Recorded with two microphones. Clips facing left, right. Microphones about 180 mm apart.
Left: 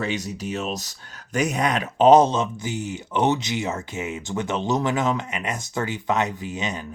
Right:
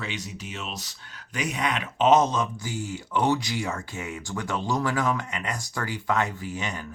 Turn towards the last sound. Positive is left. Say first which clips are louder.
# left 3 dB
turn(degrees=20)  # may be behind; listen again after turning